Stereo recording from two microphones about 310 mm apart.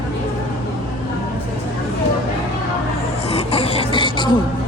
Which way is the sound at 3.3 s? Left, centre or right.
Centre.